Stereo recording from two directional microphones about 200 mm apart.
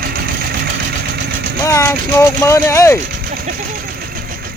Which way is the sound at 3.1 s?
50° right (ahead or behind).